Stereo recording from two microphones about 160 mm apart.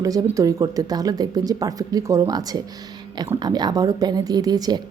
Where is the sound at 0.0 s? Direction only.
20° right (ahead or behind).